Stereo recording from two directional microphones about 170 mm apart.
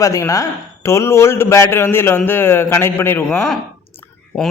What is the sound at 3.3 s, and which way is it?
Speech, centre (ahead or behind).